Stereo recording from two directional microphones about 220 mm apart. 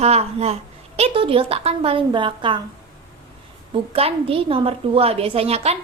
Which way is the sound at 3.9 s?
25° right (ahead or behind).